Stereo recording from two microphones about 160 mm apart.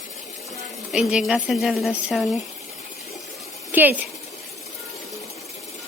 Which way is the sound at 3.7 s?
10° right (ahead or behind).